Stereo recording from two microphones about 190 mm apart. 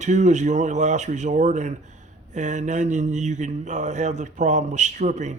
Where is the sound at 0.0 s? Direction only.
40° right (ahead or behind).